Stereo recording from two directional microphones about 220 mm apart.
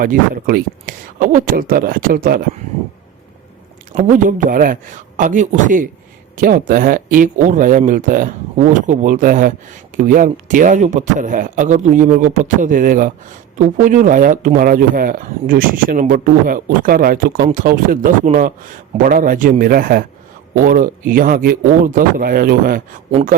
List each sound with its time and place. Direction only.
0.0 s speech: 40° right (ahead or behind)
3.9 s speech: 35° right (ahead or behind)